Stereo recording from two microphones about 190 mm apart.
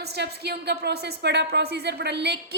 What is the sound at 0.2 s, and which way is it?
A woman's voice, 60° right (ahead or behind).